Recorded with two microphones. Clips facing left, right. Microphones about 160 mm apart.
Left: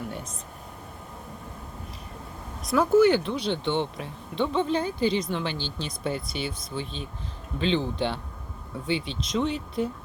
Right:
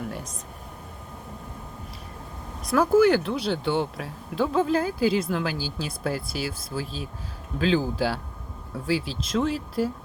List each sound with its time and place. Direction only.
2.6 s speech: centre (ahead or behind)